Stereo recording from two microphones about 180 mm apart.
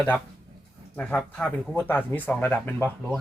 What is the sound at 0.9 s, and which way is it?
Speech, 10° left (ahead or behind).